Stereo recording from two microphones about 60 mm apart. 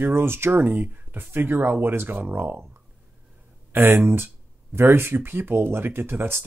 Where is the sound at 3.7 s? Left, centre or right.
Right.